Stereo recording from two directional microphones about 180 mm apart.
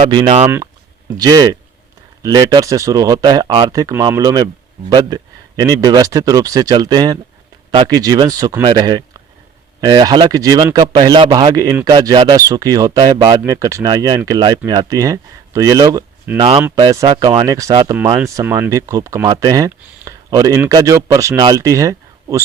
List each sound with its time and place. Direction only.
0.0 s speech: 25° right (ahead or behind)